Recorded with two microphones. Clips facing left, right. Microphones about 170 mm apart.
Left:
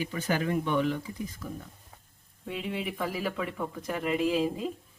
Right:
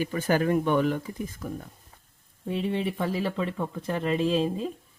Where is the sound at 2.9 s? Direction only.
25° right (ahead or behind).